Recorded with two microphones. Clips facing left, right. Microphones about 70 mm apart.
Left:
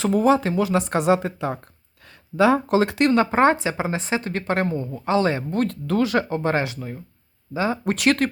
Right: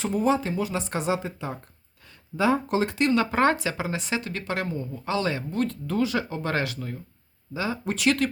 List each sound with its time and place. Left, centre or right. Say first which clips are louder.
0.0 s speech: left 6 dB; left
2.3 s speech: left 6 dB; left
3.2 s speech: left 5 dB; left
5.5 s speech: left 4 dB; left
5.9 s speech: left 6 dB; left
6.2 s speech: left 7 dB; left
6.5 s speech: left 4 dB; left
7.5 s speech: left 6 dB; left
7.9 s speech: left 2 dB; left